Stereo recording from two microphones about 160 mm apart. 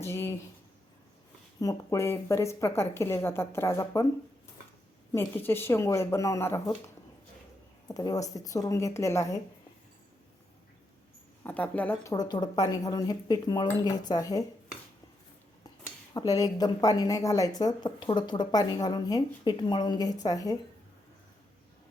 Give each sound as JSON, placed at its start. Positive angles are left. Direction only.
{"t": 0.0, "sound": "a sound", "side_deg": 15}
{"t": 1.5, "sound": "a woman's voice", "side_deg": 20}
{"t": 5.1, "sound": "a woman's voice", "side_deg": 15}
{"t": 11.4, "sound": "a woman's voice", "side_deg": 10}
{"t": 12.1, "sound": "speech", "side_deg": 25}
{"t": 16.1, "sound": "speech", "side_deg": 20}